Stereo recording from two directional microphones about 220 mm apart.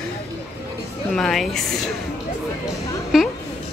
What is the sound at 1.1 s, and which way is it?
Speech, centre (ahead or behind).